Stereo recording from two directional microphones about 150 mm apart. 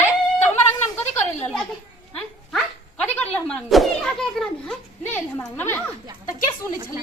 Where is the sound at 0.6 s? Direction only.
15° left (ahead or behind).